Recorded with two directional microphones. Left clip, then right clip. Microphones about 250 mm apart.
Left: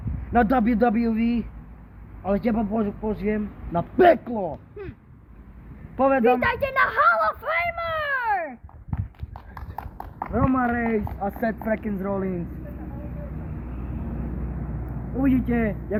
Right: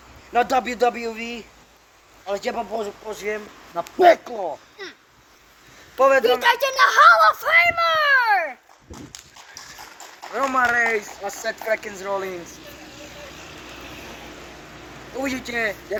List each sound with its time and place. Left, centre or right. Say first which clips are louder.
0.3 s speech: right 1 dB; centre
6.0 s a man's voice: right 3 dB; right
6.4 s a sound: right 5 dB; centre
10.3 s speech: right 5 dB; centre
15.2 s speech: left 1 dB; centre